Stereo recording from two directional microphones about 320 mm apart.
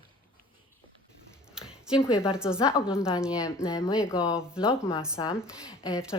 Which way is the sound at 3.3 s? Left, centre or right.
Centre.